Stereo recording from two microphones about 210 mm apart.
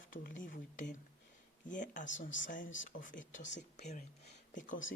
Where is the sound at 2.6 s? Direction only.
65° left (ahead or behind).